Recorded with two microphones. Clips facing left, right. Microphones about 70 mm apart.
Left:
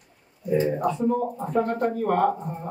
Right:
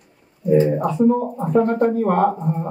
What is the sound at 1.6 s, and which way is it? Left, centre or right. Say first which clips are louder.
Speech: right 7 dB; right.